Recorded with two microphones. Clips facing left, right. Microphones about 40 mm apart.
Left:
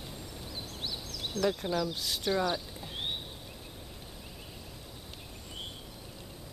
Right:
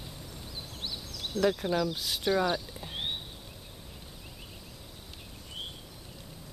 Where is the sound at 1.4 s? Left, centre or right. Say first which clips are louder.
Right 3 dB; centre.